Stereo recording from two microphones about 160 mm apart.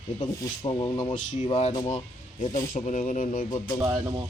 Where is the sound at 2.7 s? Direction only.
45° left (ahead or behind).